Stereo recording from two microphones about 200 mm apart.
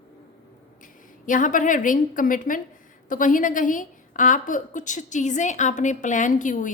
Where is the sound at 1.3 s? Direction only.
40° left (ahead or behind).